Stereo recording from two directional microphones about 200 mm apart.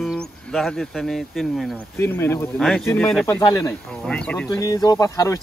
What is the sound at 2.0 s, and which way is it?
Speech, 10° left (ahead or behind).